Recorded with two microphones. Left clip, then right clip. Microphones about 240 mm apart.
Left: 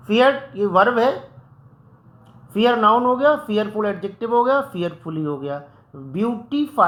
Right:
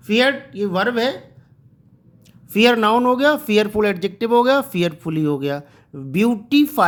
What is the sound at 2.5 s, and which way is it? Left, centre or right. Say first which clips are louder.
Speech: right 1 dB; right.